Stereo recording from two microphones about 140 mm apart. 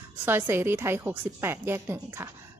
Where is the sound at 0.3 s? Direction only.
15° right (ahead or behind).